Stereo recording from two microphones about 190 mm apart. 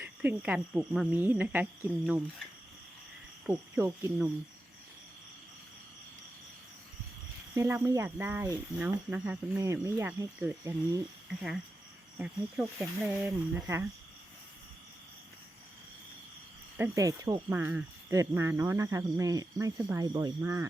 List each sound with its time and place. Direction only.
0.0 s speech: 10° right (ahead or behind)
3.4 s speech: 10° right (ahead or behind)
7.5 s speech: 15° right (ahead or behind)
11.3 s speech: 5° right (ahead or behind)
16.7 s speech: 15° right (ahead or behind)